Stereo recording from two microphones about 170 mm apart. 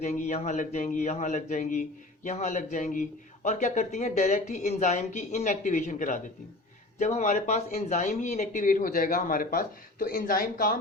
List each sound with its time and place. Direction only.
0.0 s speech: 45° left (ahead or behind)